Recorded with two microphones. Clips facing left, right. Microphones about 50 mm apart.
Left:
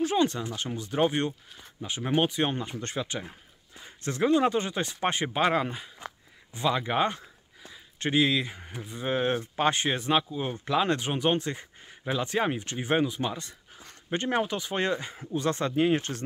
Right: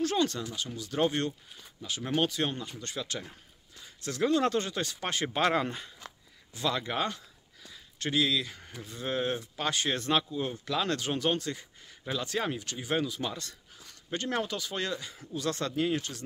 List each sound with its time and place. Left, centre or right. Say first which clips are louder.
0.0 s speech: left 3 dB; centre
5.3 s speech: right 1 dB; centre
5.9 s a sound: left 6 dB; left
7.7 s speech: left 4 dB; left
9.9 s speech: left 2 dB; centre
10.5 s speech: left 7 dB; left